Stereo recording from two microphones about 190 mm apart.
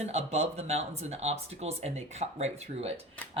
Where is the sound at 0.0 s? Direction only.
35° right (ahead or behind).